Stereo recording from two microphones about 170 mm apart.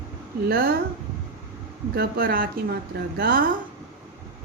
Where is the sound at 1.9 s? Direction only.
65° right (ahead or behind).